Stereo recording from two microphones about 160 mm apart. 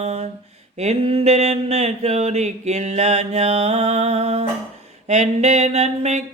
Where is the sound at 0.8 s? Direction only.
40° right (ahead or behind).